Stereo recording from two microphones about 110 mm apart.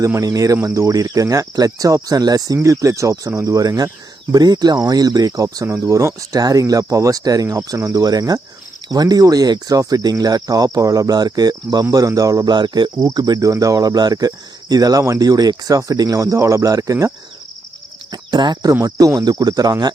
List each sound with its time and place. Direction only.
0.0 s speech: 30° right (ahead or behind)
18.1 s speech: 45° right (ahead or behind)
18.7 s speech: 30° right (ahead or behind)